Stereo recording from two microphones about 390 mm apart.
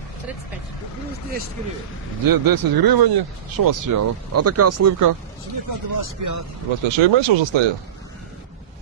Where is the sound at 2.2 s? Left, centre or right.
Right.